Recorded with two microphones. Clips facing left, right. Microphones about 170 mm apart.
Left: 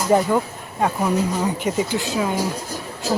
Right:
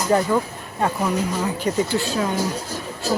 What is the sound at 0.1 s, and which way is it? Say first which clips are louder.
Speech: left 2 dB; 15° left (ahead or behind).